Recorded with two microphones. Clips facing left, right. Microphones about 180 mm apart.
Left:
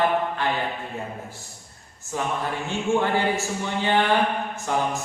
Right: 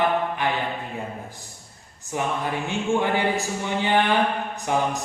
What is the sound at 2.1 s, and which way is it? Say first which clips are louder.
Speech: right 1 dB; 15° right (ahead or behind).